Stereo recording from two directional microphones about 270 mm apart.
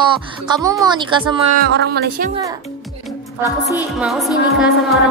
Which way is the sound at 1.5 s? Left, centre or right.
Right.